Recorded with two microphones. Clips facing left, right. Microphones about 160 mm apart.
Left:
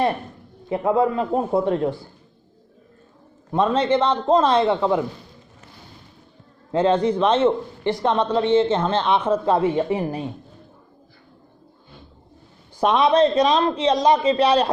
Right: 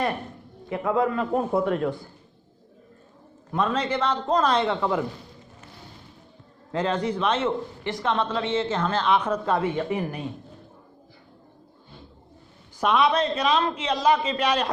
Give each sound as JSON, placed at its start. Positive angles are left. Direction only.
{"t": 0.7, "sound": "a man's voice", "side_deg": 30}
{"t": 3.5, "sound": "a man's voice", "side_deg": 30}
{"t": 6.7, "sound": "a man's voice", "side_deg": 30}
{"t": 12.8, "sound": "a man's voice", "side_deg": 35}